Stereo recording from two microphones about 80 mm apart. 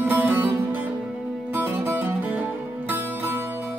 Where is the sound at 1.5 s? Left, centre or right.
Right.